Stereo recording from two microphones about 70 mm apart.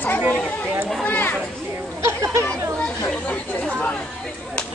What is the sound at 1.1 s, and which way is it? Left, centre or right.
Speech, left.